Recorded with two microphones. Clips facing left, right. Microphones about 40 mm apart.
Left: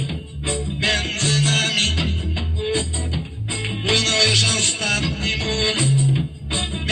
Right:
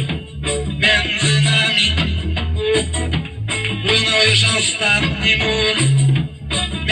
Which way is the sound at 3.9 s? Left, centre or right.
Right.